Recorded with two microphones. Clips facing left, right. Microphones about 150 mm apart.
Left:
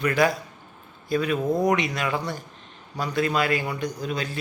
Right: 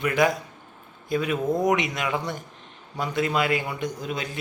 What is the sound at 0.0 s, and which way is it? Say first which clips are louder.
Speech: even; 20° right (ahead or behind).